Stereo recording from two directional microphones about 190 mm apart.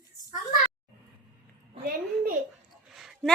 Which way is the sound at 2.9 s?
Centre (ahead or behind).